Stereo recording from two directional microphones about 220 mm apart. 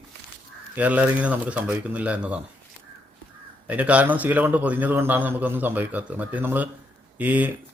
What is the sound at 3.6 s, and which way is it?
A man's voice, 5° right (ahead or behind).